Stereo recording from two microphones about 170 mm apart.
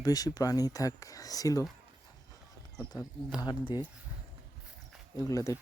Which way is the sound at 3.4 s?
25° left (ahead or behind).